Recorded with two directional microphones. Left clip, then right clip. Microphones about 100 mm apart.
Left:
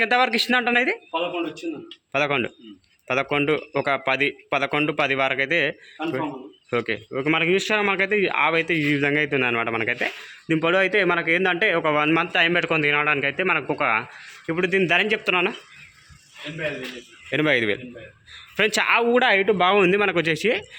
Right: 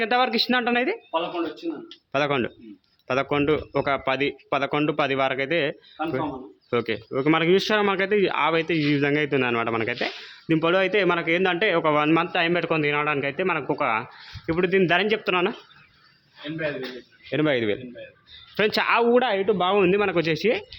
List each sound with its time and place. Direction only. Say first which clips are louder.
0.0 s a man's voice: left 2 dB; 10° right (ahead or behind)
2.1 s a man's voice: left 1 dB; 20° right (ahead or behind)
6.1 s speech: left 1 dB; centre (ahead or behind)
6.7 s a man's voice: even; 20° right (ahead or behind)
7.1 s a man's voice: right 1 dB; 40° right (ahead or behind); by 14.1 s 10° right (ahead or behind)
14.2 s a man's voice: even; 25° right (ahead or behind)
17.3 s a man's voice: left 2 dB; 10° right (ahead or behind)
18.5 s a man's voice: left 1 dB; 25° right (ahead or behind)
19.2 s speech: left 4 dB; 15° left (ahead or behind)
19.8 s a man's voice: left 2 dB; centre (ahead or behind)